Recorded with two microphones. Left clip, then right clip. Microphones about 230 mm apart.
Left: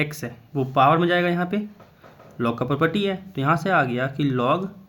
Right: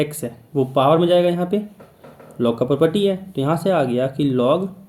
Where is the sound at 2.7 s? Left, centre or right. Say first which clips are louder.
Right 4 dB; left.